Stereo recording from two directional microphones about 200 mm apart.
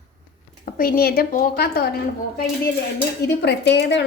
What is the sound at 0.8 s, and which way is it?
A woman's voice, 45° left (ahead or behind).